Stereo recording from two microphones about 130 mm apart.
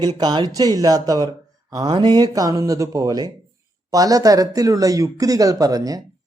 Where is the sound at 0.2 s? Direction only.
35° right (ahead or behind).